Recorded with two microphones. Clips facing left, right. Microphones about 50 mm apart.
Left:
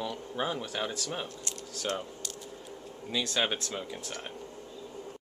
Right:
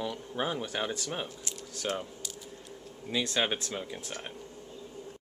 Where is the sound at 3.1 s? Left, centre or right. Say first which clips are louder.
Right 1 dB; centre.